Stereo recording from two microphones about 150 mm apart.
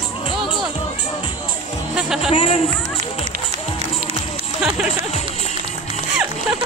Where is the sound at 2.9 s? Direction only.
45° right (ahead or behind).